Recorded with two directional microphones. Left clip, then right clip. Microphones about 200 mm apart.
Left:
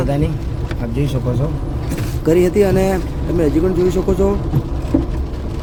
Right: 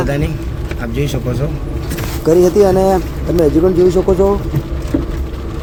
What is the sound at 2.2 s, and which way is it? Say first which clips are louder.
Speech: right 4 dB; 15° left (ahead or behind).